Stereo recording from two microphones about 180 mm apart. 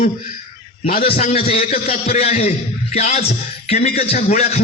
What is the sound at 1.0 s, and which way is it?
A man's voice, 35° left (ahead or behind).